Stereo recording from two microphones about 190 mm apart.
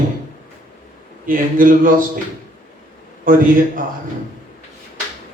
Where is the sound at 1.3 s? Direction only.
45° right (ahead or behind).